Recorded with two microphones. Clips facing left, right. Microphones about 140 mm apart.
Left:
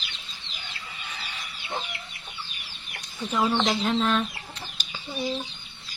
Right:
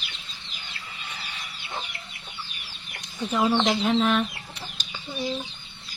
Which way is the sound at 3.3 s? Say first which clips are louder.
Right 2 dB; 10° right (ahead or behind).